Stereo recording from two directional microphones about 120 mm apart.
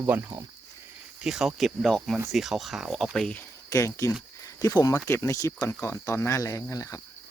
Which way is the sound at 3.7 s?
25° left (ahead or behind).